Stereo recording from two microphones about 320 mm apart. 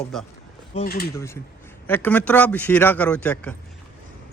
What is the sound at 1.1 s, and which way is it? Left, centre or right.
Speech, centre.